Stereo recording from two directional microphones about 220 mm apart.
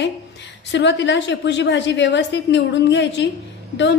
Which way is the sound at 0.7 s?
55° left (ahead or behind).